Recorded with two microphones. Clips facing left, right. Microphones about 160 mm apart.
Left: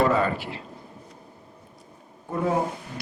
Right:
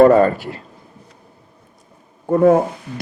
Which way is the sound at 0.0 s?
45° right (ahead or behind).